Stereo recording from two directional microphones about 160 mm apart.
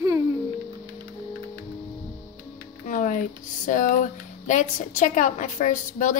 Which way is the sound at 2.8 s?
55° left (ahead or behind).